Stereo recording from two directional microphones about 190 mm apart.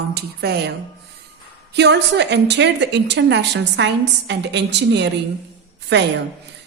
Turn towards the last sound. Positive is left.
turn(degrees=-70)  # may be behind; listen again after turning